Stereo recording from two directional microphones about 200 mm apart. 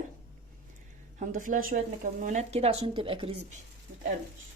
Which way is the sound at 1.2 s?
40° right (ahead or behind).